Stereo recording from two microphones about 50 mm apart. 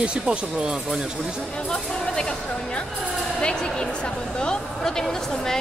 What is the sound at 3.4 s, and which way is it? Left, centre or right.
A woman's voice, centre.